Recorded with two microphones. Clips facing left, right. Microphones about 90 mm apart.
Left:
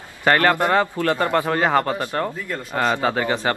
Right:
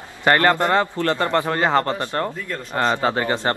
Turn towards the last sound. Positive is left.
turn(degrees=0)  # may be behind; listen again after turning